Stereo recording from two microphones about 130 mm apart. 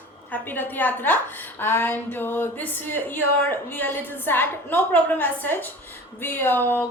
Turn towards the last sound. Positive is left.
turn(degrees=15)  # may be behind; listen again after turning